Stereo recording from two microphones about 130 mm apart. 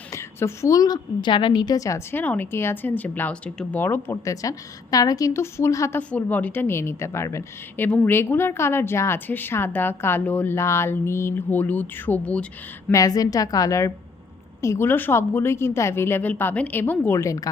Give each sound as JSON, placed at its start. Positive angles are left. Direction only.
{"t": 0.1, "sound": "a woman's voice", "side_deg": 20}
{"t": 6.0, "sound": "a woman's voice", "side_deg": 10}
{"t": 12.9, "sound": "a woman's voice", "side_deg": 30}